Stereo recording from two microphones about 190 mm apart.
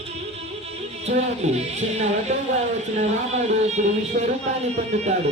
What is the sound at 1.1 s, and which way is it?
Speech, 35° right (ahead or behind).